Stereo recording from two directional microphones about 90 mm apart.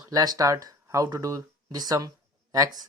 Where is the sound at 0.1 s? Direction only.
45° right (ahead or behind).